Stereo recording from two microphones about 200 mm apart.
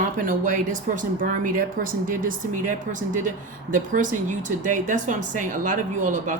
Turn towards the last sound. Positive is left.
turn(degrees=-40)  # may be behind; listen again after turning